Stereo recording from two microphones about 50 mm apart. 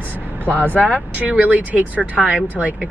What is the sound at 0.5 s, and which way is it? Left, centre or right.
Speech, left.